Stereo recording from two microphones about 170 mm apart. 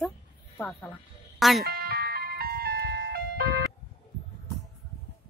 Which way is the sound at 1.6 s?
65° right (ahead or behind).